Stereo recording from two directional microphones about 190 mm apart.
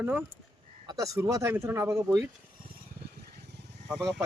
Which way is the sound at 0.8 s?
15° right (ahead or behind).